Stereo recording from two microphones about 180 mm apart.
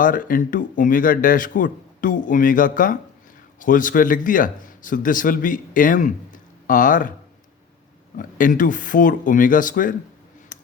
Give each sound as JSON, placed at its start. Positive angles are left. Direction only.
{"t": 0.0, "sound": "speech", "side_deg": 50}
{"t": 8.1, "sound": "speech", "side_deg": 50}
{"t": 10.5, "sound": "a sound", "side_deg": 45}